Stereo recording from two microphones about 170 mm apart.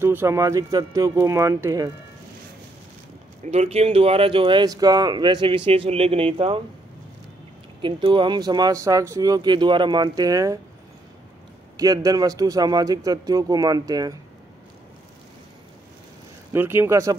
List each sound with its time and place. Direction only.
0.0 s speech: 15° right (ahead or behind)
3.4 s speech: 40° right (ahead or behind)
7.8 s speech: 30° right (ahead or behind)
11.7 s speech: 20° right (ahead or behind)
16.5 s speech: 15° right (ahead or behind)